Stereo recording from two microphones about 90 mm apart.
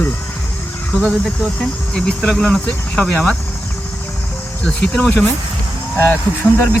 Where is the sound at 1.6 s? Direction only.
10° left (ahead or behind).